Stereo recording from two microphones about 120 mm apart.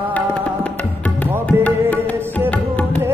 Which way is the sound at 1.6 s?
10° left (ahead or behind).